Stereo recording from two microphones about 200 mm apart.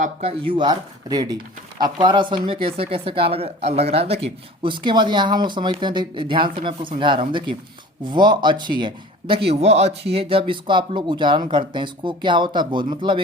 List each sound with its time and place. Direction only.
0.0 s speech: 30° right (ahead or behind)